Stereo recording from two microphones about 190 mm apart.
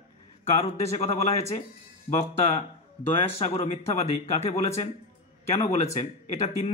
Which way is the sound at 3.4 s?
35° left (ahead or behind).